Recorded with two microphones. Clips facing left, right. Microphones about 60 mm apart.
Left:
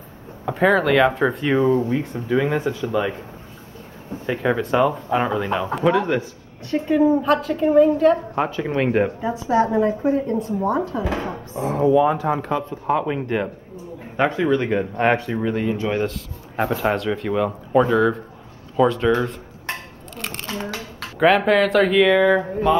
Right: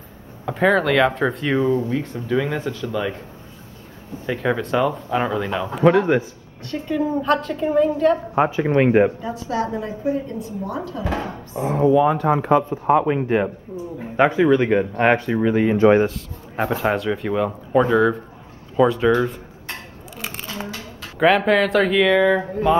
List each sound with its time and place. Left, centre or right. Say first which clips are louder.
0.5 s speech: even; centre
1.8 s speech: left 1 dB; centre
4.3 s speech: left 1 dB; centre
6.7 s a woman's voice: left 5 dB; left
7.2 s speech: left 2 dB; centre
8.4 s a man's voice: right 4 dB; centre
9.2 s a woman's voice: left 5 dB; left
11.1 s speech: even; centre
12.6 s a man's voice: right 4 dB; centre
15.6 s speech: right 8 dB; right
16.1 s speech: even; centre
21.2 s speech: even; centre